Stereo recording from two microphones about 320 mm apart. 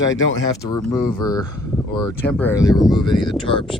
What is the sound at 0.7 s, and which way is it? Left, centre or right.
Speech, centre.